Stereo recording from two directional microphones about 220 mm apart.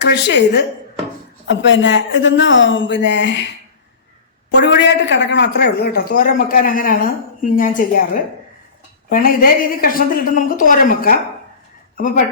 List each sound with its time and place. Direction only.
0.0 s speech: 50° left (ahead or behind)
4.5 s a woman's voice: 55° left (ahead or behind)